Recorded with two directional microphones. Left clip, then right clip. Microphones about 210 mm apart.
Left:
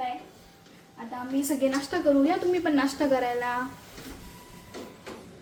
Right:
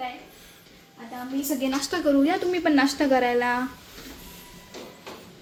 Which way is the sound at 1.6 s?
40° right (ahead or behind).